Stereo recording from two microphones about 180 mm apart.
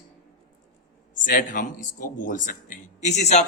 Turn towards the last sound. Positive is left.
turn(degrees=40)  # may be behind; listen again after turning